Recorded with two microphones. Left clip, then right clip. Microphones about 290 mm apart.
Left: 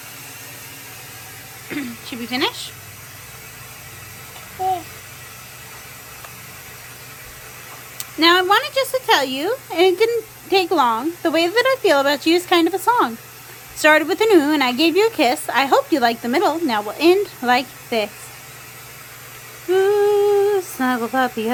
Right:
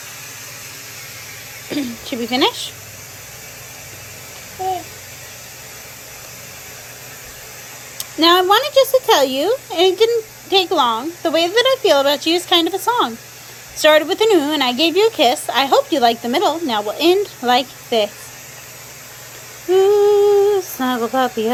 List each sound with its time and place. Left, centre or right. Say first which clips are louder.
1.7 s speech: right 5 dB; centre
7.9 s a woman's voice: right 2 dB; centre
19.7 s humming: right 3 dB; centre